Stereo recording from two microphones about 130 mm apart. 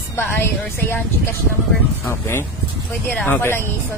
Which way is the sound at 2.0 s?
15° left (ahead or behind).